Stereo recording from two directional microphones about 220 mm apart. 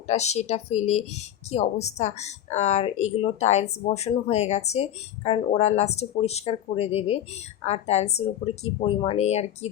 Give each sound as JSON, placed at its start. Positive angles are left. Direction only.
{"t": 0.1, "sound": "speech", "side_deg": 30}